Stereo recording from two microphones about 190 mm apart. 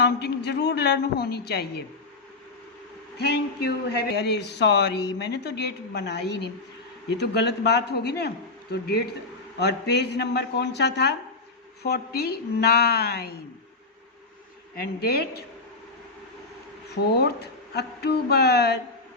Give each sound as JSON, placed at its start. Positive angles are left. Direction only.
{"t": 0.0, "sound": "speech", "side_deg": 60}
{"t": 3.2, "sound": "speech", "side_deg": 60}
{"t": 14.8, "sound": "speech", "side_deg": 55}
{"t": 16.9, "sound": "speech", "side_deg": 55}